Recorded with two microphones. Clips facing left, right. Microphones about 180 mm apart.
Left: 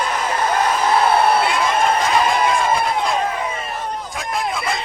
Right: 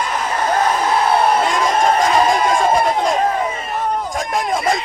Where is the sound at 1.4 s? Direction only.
40° right (ahead or behind).